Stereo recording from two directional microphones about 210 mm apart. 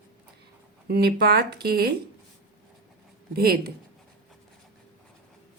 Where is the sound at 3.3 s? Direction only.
45° right (ahead or behind).